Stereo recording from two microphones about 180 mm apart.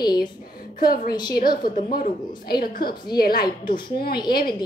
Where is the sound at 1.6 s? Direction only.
50° left (ahead or behind).